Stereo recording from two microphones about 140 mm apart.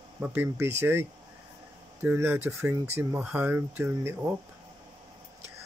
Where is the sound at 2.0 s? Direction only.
15° right (ahead or behind).